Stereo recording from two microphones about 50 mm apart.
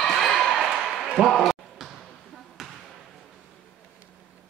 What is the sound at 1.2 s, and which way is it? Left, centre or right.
Basketball bounce, centre.